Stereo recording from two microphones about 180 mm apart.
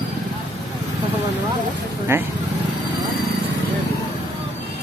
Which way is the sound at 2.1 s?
15° right (ahead or behind).